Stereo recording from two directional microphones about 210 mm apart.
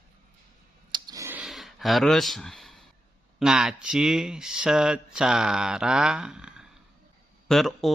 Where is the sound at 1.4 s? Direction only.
Centre (ahead or behind).